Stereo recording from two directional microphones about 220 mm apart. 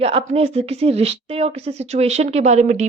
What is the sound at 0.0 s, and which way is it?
Speech, 25° right (ahead or behind).